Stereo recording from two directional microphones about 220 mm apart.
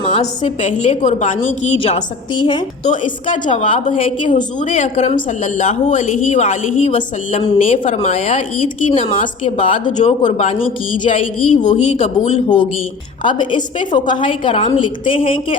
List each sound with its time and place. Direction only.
0.0 s a woman's voice: 25° left (ahead or behind)
3.2 s a woman's voice: 35° left (ahead or behind)
3.5 s a woman's voice: 25° left (ahead or behind)
4.3 s a woman's voice: 35° left (ahead or behind)